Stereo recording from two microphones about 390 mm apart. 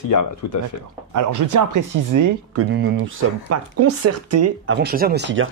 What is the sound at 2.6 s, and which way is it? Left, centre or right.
Speech, right.